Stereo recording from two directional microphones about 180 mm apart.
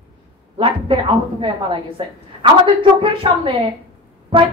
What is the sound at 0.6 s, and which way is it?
A woman's voice, 30° right (ahead or behind).